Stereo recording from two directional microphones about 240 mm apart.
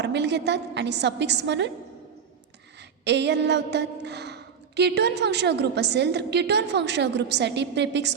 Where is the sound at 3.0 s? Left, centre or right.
Right.